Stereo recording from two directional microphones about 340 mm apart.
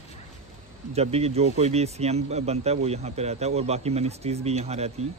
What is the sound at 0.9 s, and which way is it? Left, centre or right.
Speech, centre.